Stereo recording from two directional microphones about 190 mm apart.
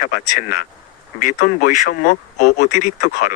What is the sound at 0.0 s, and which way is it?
Speech, 45° left (ahead or behind).